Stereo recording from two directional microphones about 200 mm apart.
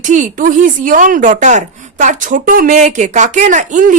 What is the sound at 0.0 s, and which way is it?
Speech, 40° right (ahead or behind).